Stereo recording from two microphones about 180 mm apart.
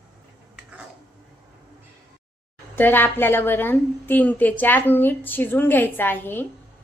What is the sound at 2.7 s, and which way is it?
A woman's voice, 10° left (ahead or behind).